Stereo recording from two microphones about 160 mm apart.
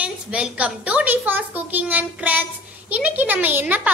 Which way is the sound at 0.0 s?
5° right (ahead or behind).